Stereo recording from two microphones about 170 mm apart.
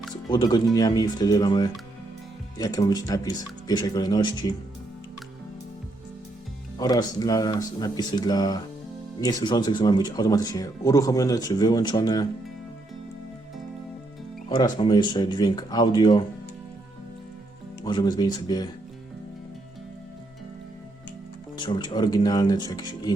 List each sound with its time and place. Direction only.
0.3 s speech: 25° left (ahead or behind)
6.7 s speech: 20° left (ahead or behind)
14.5 s speech: 25° left (ahead or behind)
17.8 s speech: 25° left (ahead or behind)
21.6 s speech: 25° left (ahead or behind)